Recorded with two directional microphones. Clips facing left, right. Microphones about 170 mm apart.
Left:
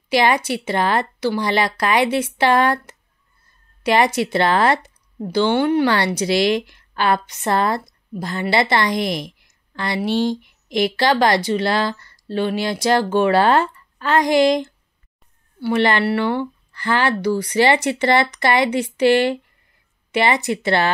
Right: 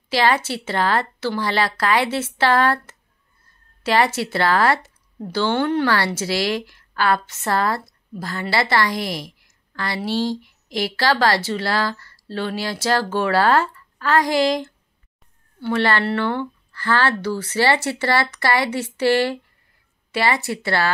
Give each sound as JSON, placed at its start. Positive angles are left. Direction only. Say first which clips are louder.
{"t": 0.1, "sound": "a woman's voice", "louder": "left 2 dB", "side_deg": 15}